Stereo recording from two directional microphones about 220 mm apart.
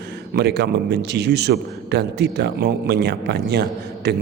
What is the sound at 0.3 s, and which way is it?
A man's voice, 50° right (ahead or behind).